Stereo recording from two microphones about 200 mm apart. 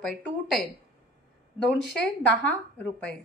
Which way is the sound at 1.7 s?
Centre (ahead or behind).